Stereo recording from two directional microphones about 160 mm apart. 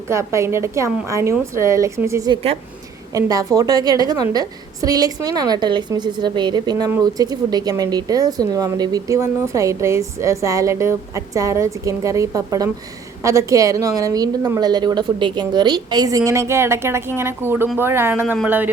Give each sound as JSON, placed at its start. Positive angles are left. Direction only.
{"t": 0.1, "sound": "a woman's voice", "side_deg": -15}
{"t": 2.3, "sound": "a woman's voice", "side_deg": -40}
{"t": 3.1, "sound": "a woman's voice", "side_deg": -20}